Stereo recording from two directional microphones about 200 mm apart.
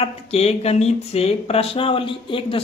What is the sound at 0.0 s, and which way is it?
Speech, 30° left (ahead or behind).